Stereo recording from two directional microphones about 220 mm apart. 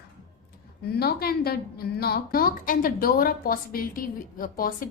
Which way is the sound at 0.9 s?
45° left (ahead or behind).